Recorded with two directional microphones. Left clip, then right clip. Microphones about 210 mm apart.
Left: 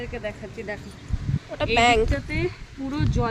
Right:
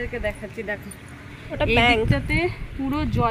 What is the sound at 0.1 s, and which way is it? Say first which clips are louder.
Speech: right 4 dB; 40° right (ahead or behind).